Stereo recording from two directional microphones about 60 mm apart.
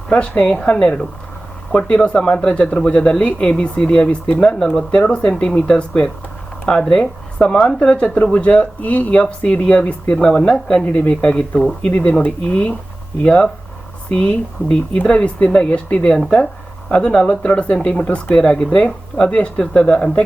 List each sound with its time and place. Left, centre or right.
0.1 s speech: centre
2.0 s speech: centre